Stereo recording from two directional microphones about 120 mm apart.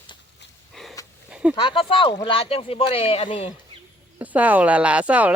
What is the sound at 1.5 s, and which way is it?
Speech, 50° left (ahead or behind).